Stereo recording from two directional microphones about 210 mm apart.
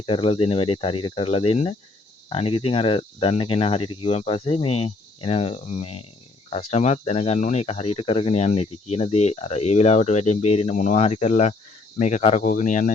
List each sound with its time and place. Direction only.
0.0 s speech: 25° left (ahead or behind)